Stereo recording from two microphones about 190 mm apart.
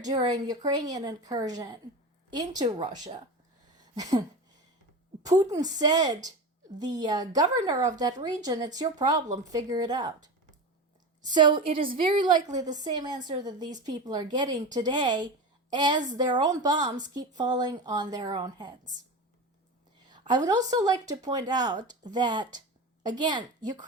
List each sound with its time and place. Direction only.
0.0 s speech: 20° right (ahead or behind)
3.8 s a sound: 20° right (ahead or behind)
5.2 s speech: 20° right (ahead or behind)
11.3 s speech: 25° right (ahead or behind)
20.1 s a woman's voice: 25° right (ahead or behind)